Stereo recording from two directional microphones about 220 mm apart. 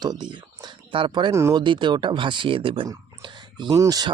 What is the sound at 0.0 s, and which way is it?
Speech, 20° right (ahead or behind).